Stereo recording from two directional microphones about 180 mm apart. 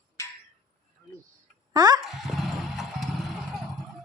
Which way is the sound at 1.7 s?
20° right (ahead or behind).